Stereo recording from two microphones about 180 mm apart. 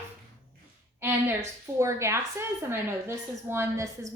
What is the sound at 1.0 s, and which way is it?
A woman's voice, 15° right (ahead or behind).